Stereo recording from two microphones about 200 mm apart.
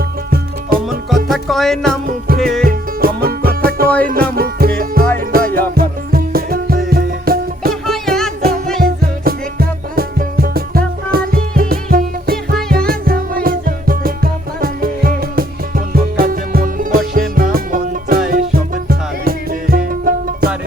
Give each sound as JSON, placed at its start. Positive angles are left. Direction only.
{"t": 0.7, "sound": "music", "side_deg": -45}
{"t": 1.3, "sound": "music", "side_deg": 0}
{"t": 2.0, "sound": "music", "side_deg": -45}